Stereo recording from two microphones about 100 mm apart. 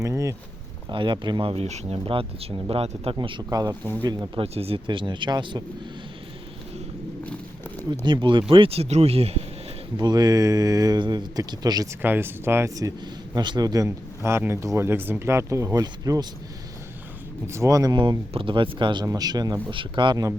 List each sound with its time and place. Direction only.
0.0 s a sound: 30° right (ahead or behind)
0.9 s speech: 50° right (ahead or behind); by 3.2 s 75° right (ahead or behind)
3.2 s speech: 55° right (ahead or behind)
3.5 s speech: 40° right (ahead or behind)
4.4 s speech: 85° right
4.9 s speech: 55° right (ahead or behind)
7.9 s speech: 50° right (ahead or behind); by 9.4 s 90° right
10.0 s speech: 40° right (ahead or behind)
12.0 s speech: 20° right (ahead or behind)
13.3 s speech: 45° right (ahead or behind)
17.4 s speech: 30° right (ahead or behind)
18.3 s speech: 60° right (ahead or behind)
19.0 s speech: 40° right (ahead or behind)
19.7 s speech: 55° right (ahead or behind)